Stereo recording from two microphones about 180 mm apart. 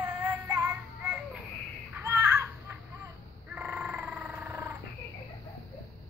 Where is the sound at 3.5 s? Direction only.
5° right (ahead or behind).